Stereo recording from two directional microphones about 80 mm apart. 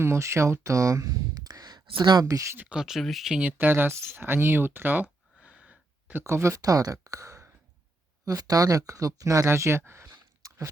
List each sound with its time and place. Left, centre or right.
0.0 s speech: right
2.2 s speech: right
2.6 s speech: centre
3.4 s speech: right
5.4 s a sound: centre
6.2 s speech: right
10.4 s chewing: right